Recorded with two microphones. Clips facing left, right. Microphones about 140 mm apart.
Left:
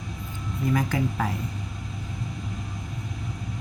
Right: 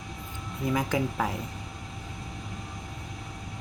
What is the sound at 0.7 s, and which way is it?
Speech, 20° right (ahead or behind).